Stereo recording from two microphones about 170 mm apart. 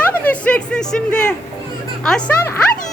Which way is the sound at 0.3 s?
5° left (ahead or behind).